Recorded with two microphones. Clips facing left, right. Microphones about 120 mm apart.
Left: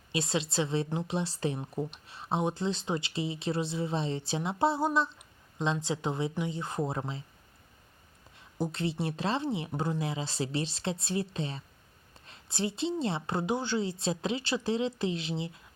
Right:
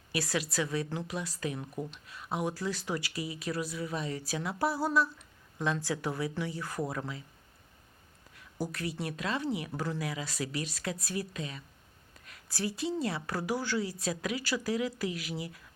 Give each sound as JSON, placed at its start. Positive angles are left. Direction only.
{"t": 0.1, "sound": "a woman's voice", "side_deg": 25}
{"t": 8.4, "sound": "a woman's voice", "side_deg": 25}